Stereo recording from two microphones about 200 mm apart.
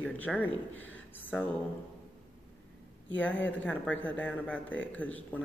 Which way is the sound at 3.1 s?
10° left (ahead or behind).